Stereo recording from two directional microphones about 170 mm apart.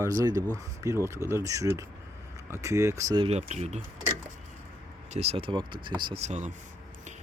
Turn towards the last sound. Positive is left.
turn(degrees=-45)  # may be behind; listen again after turning